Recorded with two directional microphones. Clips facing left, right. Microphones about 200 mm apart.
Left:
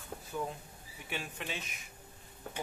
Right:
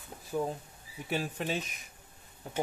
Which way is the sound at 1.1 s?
40° right (ahead or behind).